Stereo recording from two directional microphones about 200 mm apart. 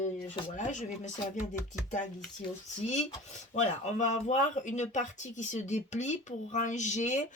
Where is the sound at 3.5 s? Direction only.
35° left (ahead or behind).